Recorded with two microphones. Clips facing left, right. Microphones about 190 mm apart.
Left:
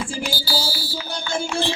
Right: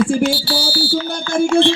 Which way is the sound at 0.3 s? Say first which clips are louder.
Right 6 dB; 65° right (ahead or behind).